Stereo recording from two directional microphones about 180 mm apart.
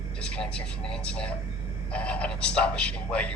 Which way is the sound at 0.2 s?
5° left (ahead or behind).